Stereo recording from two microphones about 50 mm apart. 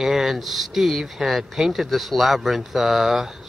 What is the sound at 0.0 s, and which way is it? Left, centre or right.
Speech, centre.